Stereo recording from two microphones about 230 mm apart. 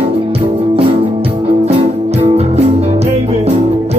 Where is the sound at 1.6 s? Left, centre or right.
Right.